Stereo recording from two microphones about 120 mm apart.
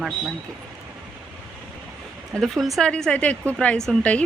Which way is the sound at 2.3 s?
Centre (ahead or behind).